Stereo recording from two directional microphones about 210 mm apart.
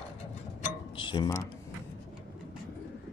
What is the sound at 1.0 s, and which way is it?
Speech, 25° left (ahead or behind).